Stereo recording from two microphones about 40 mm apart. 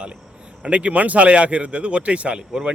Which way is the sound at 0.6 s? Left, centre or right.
Right.